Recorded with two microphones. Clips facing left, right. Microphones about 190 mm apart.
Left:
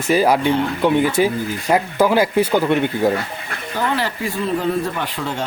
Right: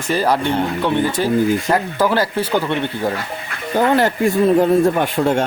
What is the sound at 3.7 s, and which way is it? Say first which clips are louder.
Speech: right 7 dB; 50° right (ahead or behind).